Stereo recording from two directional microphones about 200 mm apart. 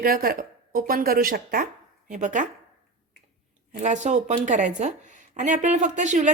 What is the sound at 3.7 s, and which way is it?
A woman's voice, 35° right (ahead or behind).